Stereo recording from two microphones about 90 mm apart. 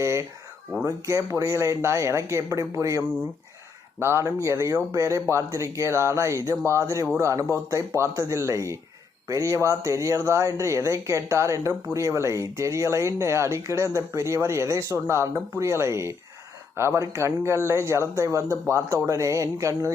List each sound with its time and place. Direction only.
0.0 s a sound: 35° right (ahead or behind)
0.9 s speech: 35° right (ahead or behind)
4.0 s speech: 30° right (ahead or behind)